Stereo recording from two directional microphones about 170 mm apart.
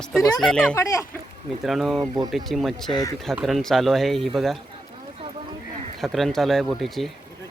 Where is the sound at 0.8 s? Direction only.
20° left (ahead or behind).